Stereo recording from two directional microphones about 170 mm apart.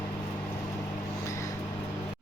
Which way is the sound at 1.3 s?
20° left (ahead or behind).